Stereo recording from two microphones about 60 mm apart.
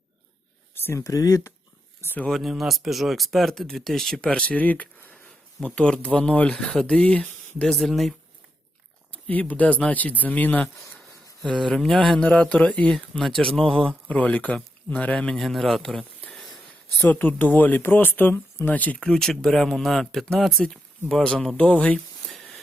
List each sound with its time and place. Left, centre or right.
0.7 s a sound: left
0.9 s speech: left
2.3 s speech: centre
4.3 s speech: left
5.6 s speech: centre
7.7 s speech: centre
9.1 s speech: left
11.4 s speech: centre
12.2 s speech: left
12.9 s speech: centre
15.4 s speech: centre
17.0 s speech: left
19.0 s speech: centre
22.3 s a sound: centre